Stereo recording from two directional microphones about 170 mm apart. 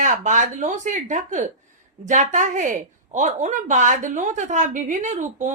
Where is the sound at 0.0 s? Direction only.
45° right (ahead or behind).